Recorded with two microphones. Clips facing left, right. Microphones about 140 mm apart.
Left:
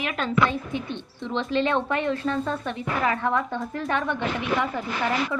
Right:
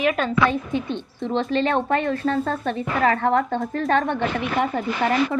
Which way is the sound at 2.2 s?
60° right (ahead or behind).